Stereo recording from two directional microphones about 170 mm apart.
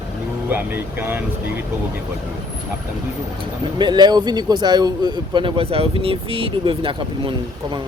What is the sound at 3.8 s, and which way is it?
A man's voice, 25° right (ahead or behind).